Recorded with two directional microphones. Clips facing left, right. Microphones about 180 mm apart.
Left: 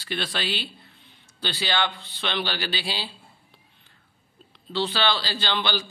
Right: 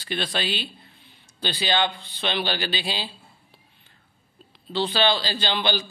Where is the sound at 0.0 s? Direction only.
15° right (ahead or behind).